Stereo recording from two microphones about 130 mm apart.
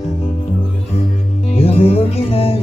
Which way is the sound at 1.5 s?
50° left (ahead or behind).